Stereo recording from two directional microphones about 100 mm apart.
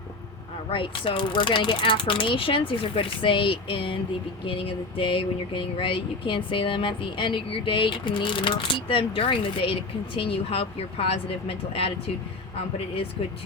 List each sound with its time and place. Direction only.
0.7 s speech: 60° left (ahead or behind)